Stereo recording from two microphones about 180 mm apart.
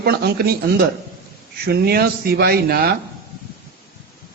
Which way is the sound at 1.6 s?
60° right (ahead or behind).